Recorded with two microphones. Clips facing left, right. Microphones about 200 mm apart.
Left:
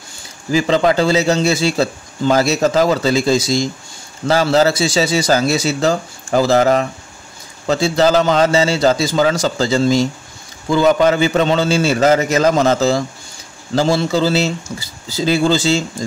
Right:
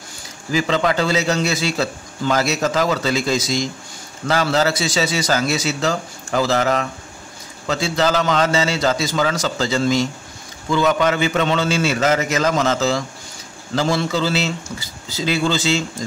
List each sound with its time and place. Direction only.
0.5 s a man's voice: 35° left (ahead or behind)